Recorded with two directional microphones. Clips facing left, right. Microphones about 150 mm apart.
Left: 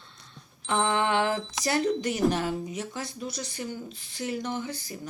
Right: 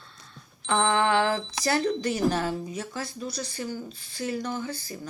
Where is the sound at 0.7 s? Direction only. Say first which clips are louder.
Right 2 dB; 20° left (ahead or behind).